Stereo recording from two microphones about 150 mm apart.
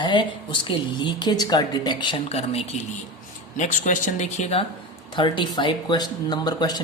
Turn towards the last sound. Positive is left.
turn(degrees=25)  # may be behind; listen again after turning